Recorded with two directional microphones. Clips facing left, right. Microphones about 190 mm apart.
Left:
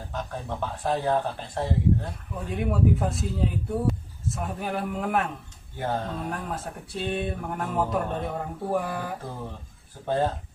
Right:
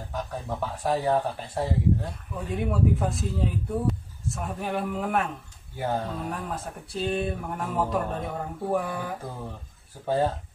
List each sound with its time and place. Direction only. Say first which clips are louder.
0.1 s speech: right 1 dB; 5° right (ahead or behind)